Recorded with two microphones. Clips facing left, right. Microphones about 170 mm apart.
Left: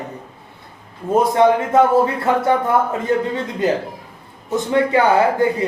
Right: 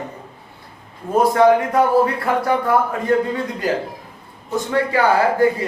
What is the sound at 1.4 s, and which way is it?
Speech, 25° left (ahead or behind).